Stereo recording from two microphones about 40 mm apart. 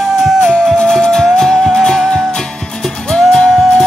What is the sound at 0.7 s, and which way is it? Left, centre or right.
Music, centre.